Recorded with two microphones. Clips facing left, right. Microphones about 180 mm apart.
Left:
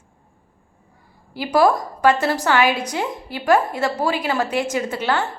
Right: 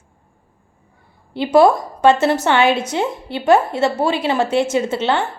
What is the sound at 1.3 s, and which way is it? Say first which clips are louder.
A woman's voice: right 4 dB; 25° right (ahead or behind).